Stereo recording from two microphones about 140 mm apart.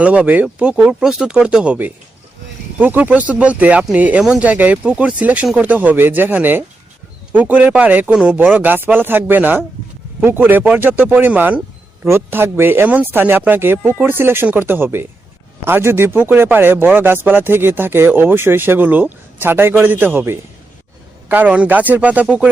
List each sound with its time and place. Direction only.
0.0 s speech: 10° right (ahead or behind)